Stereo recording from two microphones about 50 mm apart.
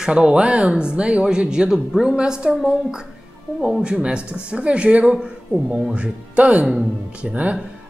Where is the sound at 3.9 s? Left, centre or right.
Right.